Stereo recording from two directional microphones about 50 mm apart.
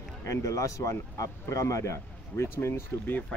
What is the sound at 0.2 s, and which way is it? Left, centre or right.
A man's voice, left.